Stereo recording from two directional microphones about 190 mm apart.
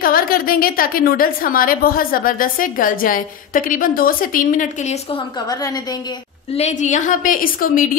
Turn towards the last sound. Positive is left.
turn(degrees=45)  # may be behind; listen again after turning